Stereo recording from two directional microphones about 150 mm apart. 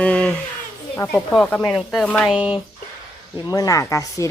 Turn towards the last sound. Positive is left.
turn(degrees=20)  # may be behind; listen again after turning